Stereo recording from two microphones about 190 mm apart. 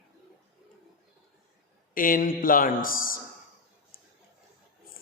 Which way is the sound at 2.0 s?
45° left (ahead or behind).